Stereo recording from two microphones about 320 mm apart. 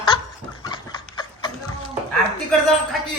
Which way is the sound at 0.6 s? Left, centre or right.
Centre.